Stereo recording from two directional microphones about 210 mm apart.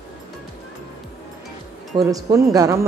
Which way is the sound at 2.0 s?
15° right (ahead or behind).